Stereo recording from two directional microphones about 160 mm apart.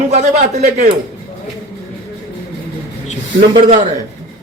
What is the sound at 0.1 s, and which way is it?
Speech, 45° right (ahead or behind).